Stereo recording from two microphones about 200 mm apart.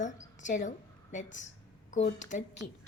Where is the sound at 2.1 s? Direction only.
40° left (ahead or behind).